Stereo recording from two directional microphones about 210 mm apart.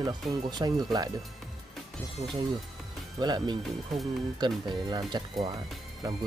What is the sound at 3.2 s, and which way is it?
Speech, 20° right (ahead or behind).